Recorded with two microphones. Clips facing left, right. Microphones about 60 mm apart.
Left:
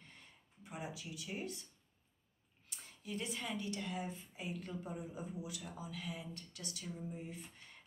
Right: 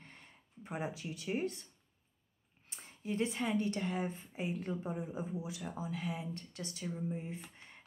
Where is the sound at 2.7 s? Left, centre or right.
Right.